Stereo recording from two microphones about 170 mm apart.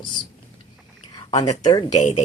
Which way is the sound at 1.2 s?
25° left (ahead or behind).